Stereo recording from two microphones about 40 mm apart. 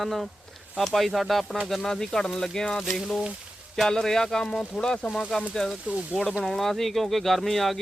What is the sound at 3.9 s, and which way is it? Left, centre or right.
Speech, centre.